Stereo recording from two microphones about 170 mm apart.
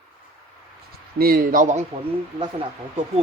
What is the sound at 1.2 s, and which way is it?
Speech, 60° right (ahead or behind).